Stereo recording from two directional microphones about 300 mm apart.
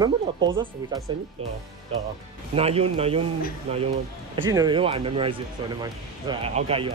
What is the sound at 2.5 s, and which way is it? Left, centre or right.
Speech, centre.